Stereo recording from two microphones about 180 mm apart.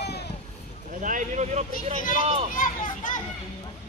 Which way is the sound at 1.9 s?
50° left (ahead or behind).